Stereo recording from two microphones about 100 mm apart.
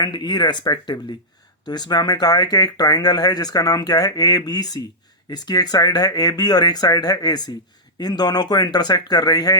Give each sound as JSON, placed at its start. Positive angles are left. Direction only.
{"t": 0.0, "sound": "speech", "side_deg": 45}